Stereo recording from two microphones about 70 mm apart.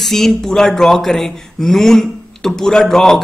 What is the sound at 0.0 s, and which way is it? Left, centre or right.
Speech, centre.